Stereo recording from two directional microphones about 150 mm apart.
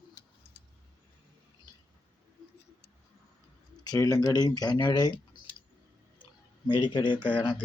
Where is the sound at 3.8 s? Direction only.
25° left (ahead or behind).